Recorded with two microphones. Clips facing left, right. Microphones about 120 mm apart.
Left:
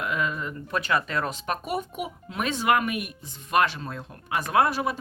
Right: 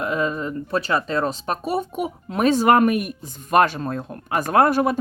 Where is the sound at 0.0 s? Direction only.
35° right (ahead or behind).